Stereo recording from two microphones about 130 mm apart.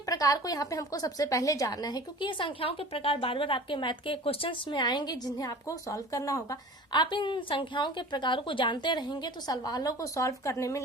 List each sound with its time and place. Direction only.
0.0 s a woman's voice: 25° left (ahead or behind)